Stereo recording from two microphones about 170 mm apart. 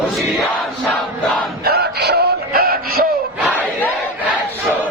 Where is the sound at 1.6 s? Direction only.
70° right (ahead or behind).